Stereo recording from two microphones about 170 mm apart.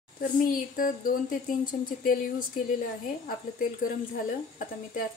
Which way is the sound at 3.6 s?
55° left (ahead or behind).